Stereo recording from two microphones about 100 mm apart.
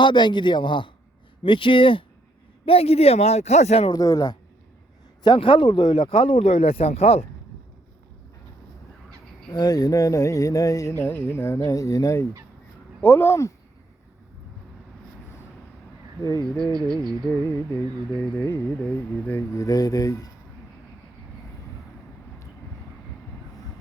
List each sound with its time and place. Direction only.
0.0 s a man's voice: 50° left (ahead or behind)
2.6 s speech: 85° left
3.9 s speech: 40° left (ahead or behind)
5.2 s speech: 60° left (ahead or behind); by 7.3 s 90° left
9.5 s speech: 40° left (ahead or behind)
10.9 s speech: 20° left (ahead or behind)
13.0 s speech: 20° left (ahead or behind)
16.2 s speech: 40° left (ahead or behind)
16.9 s speech: 5° left (ahead or behind)
17.5 s speech: 20° left (ahead or behind)
19.5 s speech: 35° left (ahead or behind)